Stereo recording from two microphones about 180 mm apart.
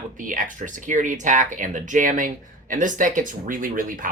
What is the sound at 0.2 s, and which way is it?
Speech, 50° right (ahead or behind).